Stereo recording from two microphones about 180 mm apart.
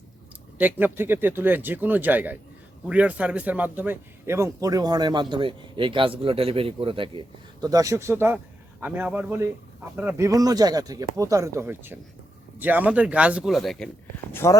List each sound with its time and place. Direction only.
0.6 s a man's voice: 10° right (ahead or behind); by 7.2 s 30° right (ahead or behind)
7.6 s speech: 20° right (ahead or behind); by 13.9 s 5° left (ahead or behind)
14.4 s speech: 15° left (ahead or behind)